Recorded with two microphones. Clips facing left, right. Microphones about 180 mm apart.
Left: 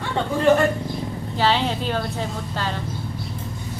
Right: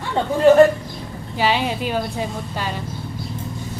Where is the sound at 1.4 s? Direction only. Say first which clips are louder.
Right 1 dB; 10° right (ahead or behind).